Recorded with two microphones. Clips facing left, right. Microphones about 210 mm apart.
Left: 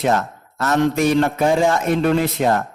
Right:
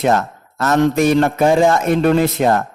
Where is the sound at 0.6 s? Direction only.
45° right (ahead or behind).